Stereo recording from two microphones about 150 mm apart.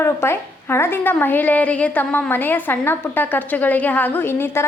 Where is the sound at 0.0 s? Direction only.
15° left (ahead or behind).